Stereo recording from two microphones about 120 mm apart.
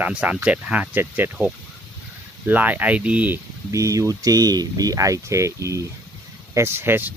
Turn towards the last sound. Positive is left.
turn(degrees=-20)  # may be behind; listen again after turning